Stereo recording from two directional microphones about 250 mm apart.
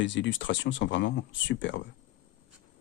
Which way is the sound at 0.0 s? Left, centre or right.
Left.